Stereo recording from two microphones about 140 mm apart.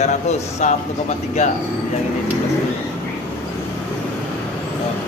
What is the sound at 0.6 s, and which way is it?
Speech, 60° left (ahead or behind).